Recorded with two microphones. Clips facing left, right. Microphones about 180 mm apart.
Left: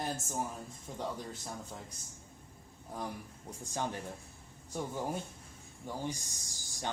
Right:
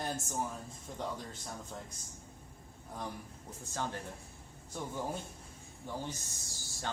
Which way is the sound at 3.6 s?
15° left (ahead or behind).